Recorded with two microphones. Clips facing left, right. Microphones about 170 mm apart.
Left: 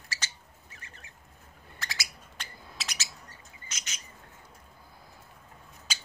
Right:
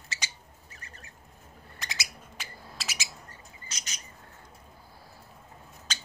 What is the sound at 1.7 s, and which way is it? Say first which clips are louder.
Bird: even; 20° right (ahead or behind).